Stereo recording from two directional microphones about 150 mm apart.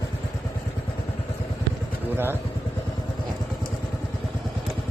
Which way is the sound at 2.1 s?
15° right (ahead or behind).